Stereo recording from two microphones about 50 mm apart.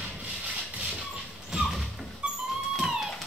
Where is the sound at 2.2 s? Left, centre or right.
Right.